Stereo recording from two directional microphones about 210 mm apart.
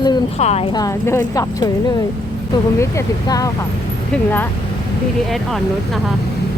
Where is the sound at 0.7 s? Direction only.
15° left (ahead or behind).